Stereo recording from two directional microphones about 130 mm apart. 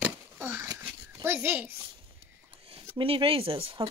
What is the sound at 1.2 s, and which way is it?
Speech, 20° right (ahead or behind).